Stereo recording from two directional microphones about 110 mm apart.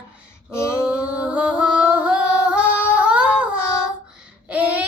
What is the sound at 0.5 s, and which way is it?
Female singing, 25° left (ahead or behind).